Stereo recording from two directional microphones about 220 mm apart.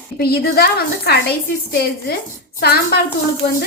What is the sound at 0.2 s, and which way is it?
A woman's voice, 45° left (ahead or behind).